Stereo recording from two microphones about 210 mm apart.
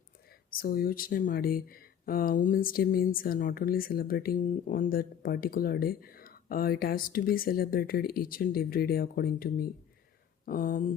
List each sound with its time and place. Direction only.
0.3 s speech: 45° left (ahead or behind)